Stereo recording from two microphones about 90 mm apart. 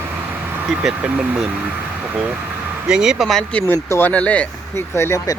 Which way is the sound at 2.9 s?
10° right (ahead or behind).